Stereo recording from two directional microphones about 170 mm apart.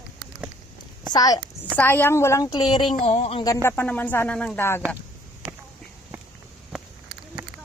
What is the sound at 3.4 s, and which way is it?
Speech, 15° left (ahead or behind).